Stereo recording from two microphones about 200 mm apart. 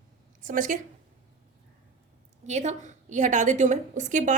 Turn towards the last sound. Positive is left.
turn(degrees=-40)  # may be behind; listen again after turning